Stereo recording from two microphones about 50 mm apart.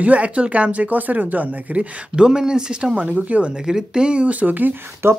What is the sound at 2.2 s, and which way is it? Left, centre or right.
Speech, centre.